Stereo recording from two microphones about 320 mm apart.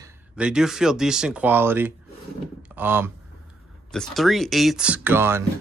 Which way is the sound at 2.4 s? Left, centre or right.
Centre.